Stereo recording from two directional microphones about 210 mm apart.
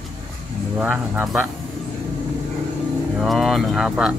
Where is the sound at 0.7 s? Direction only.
5° right (ahead or behind).